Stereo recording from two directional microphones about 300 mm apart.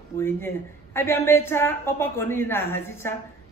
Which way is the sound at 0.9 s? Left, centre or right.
Centre.